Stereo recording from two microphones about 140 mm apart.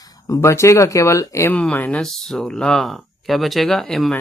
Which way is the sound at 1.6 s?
10° left (ahead or behind).